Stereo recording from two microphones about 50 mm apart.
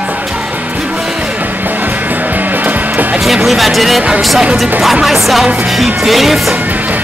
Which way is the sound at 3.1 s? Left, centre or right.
Centre.